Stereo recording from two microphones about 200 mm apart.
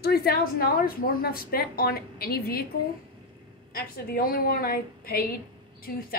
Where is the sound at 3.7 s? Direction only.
45° left (ahead or behind).